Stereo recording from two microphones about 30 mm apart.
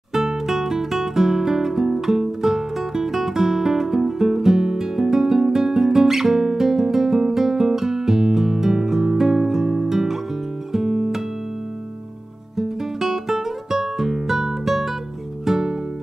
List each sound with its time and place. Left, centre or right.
0.5 s guitar: centre
10.7 s music: centre
12.5 s music: centre